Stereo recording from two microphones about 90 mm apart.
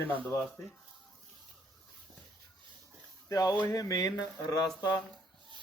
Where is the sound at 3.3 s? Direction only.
40° left (ahead or behind).